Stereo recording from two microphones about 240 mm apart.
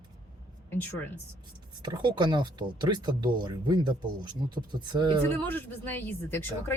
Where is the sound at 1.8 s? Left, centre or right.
Centre.